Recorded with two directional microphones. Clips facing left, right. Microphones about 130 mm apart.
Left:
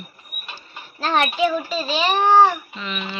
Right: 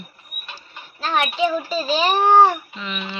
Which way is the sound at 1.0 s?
Centre (ahead or behind).